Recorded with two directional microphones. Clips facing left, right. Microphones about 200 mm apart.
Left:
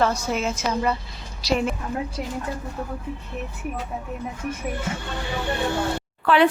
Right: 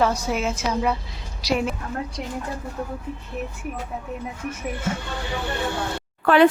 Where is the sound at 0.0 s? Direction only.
10° right (ahead or behind).